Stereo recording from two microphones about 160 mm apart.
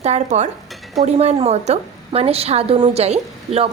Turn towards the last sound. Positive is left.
turn(degrees=-40)  # may be behind; listen again after turning